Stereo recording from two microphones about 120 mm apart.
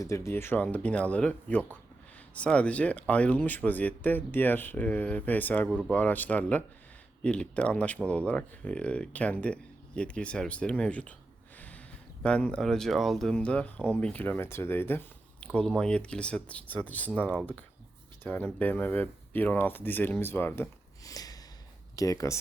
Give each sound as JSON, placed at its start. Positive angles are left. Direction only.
{"t": 0.0, "sound": "speech", "side_deg": 25}
{"t": 12.2, "sound": "speech", "side_deg": 10}
{"t": 21.0, "sound": "a sound", "side_deg": 30}
{"t": 21.9, "sound": "speech", "side_deg": 30}